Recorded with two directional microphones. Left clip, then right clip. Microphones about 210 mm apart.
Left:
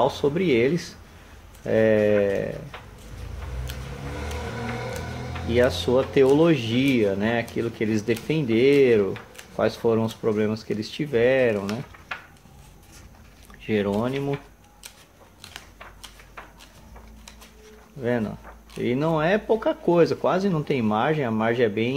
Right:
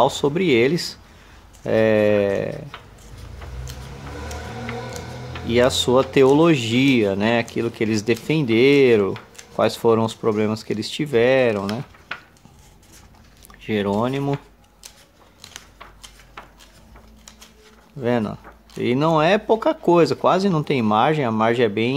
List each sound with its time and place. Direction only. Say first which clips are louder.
0.0 s speech: right 4 dB; 25° right (ahead or behind)
5.5 s speech: right 4 dB; 25° right (ahead or behind)
13.6 s speech: right 3 dB; 20° right (ahead or behind)
18.0 s speech: right 4 dB; 25° right (ahead or behind)